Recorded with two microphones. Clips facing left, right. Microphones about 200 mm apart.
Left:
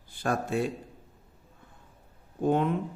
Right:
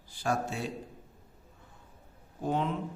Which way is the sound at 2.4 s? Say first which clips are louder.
Left 6 dB; 55° left (ahead or behind).